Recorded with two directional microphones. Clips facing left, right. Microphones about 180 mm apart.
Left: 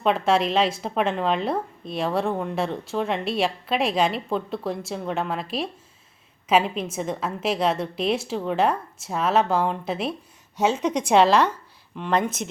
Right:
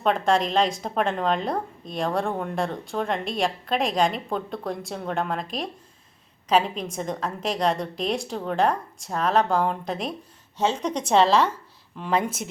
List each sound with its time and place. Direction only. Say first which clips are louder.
0.0 s a woman's voice: left 1 dB; 5° left (ahead or behind)